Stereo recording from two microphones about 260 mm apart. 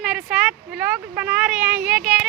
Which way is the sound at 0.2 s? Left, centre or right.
Centre.